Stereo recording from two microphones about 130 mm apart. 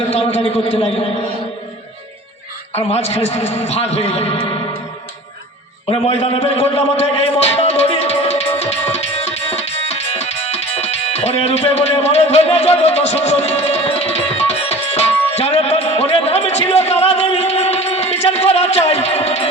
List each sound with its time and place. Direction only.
0.1 s a man's voice: 55° left (ahead or behind)
2.7 s a man's voice: 55° left (ahead or behind)
5.9 s a man's voice: 50° left (ahead or behind)
8.9 s music: 55° left (ahead or behind)